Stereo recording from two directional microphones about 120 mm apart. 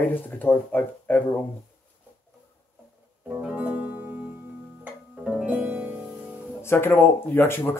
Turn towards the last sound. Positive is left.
turn(degrees=15)  # may be behind; listen again after turning